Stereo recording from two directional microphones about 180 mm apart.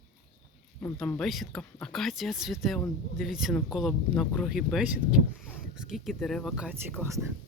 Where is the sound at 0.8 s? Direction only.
10° left (ahead or behind).